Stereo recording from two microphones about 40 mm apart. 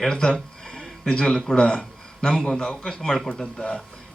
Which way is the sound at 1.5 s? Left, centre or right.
Left.